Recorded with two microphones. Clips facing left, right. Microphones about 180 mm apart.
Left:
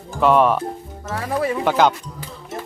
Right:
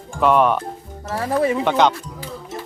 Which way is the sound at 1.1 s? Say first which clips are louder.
Right 3 dB; 30° right (ahead or behind).